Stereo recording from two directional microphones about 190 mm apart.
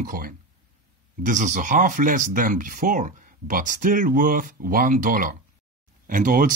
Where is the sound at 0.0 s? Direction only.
45° right (ahead or behind).